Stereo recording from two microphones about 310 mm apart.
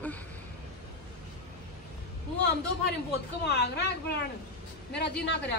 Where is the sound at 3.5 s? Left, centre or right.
Left.